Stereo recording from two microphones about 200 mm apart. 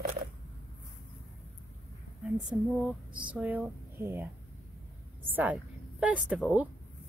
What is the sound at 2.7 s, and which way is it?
A woman's voice, centre (ahead or behind).